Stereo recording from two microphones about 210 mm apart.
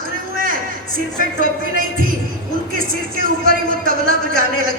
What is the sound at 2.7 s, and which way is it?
A man's voice, 40° right (ahead or behind).